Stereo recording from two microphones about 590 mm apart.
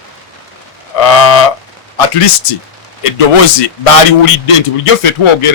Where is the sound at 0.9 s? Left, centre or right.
Left.